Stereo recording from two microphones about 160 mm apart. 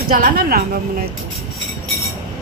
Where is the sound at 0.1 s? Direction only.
65° right (ahead or behind).